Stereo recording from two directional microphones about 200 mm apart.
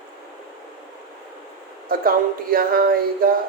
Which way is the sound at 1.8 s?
45° right (ahead or behind).